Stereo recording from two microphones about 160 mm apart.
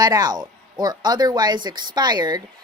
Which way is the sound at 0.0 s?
25° right (ahead or behind).